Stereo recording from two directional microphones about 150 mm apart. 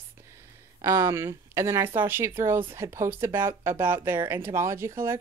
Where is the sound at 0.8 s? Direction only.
20° right (ahead or behind).